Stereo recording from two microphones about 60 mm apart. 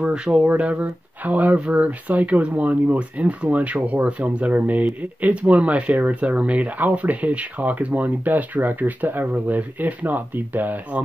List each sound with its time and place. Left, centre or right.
0.0 s speech: centre